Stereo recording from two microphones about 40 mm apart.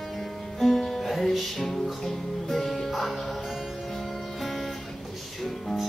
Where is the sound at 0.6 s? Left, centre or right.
Centre.